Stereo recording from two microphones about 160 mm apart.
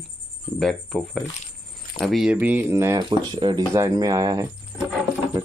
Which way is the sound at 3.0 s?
30° right (ahead or behind).